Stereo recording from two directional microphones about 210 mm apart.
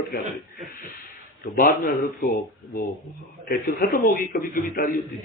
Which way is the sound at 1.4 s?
45° left (ahead or behind).